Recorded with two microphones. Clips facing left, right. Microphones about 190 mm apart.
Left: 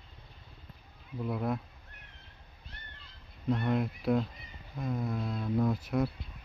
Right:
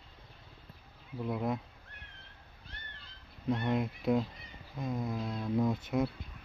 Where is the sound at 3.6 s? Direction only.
20° right (ahead or behind).